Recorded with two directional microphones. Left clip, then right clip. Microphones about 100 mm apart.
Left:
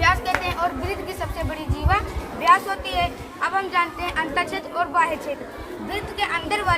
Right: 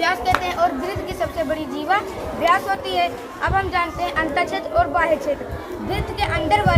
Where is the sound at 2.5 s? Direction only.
25° left (ahead or behind).